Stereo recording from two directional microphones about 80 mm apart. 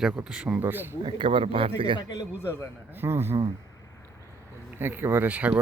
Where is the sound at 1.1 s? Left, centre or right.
Right.